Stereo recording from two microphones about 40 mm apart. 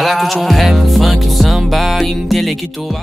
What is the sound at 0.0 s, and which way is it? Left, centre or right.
Music, centre.